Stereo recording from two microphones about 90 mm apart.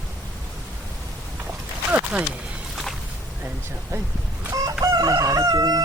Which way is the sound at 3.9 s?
30° right (ahead or behind).